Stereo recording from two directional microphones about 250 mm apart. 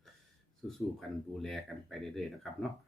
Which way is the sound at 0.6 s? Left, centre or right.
Centre.